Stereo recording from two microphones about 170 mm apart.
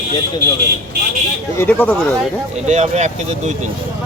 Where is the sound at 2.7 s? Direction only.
40° right (ahead or behind).